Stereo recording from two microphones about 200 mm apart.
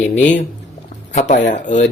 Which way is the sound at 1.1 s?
35° left (ahead or behind).